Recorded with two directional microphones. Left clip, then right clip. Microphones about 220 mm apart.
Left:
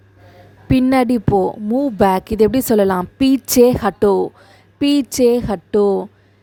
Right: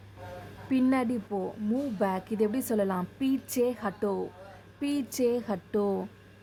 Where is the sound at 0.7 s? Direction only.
40° left (ahead or behind).